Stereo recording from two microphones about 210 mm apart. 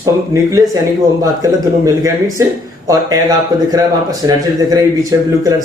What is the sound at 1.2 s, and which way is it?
Speech, 15° right (ahead or behind).